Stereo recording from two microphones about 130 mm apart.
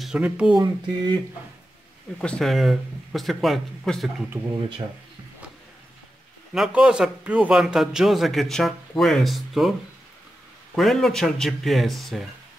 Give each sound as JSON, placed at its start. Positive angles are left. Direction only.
{"t": 0.0, "sound": "speech", "side_deg": -5}
{"t": 0.6, "sound": "speech", "side_deg": -35}
{"t": 2.1, "sound": "a man's voice", "side_deg": 5}
{"t": 6.5, "sound": "a man's voice", "side_deg": -5}